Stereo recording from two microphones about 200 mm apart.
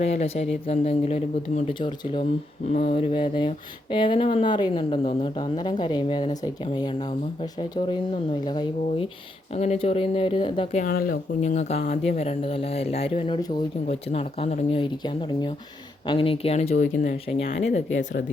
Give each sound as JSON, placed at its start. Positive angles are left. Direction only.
{"t": 0.0, "sound": "speech", "side_deg": 30}
{"t": 10.8, "sound": "speech", "side_deg": 50}
{"t": 11.4, "sound": "speech", "side_deg": 35}
{"t": 17.9, "sound": "speech", "side_deg": 65}